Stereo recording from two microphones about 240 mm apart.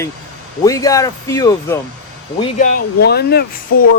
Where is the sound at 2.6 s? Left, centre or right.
Left.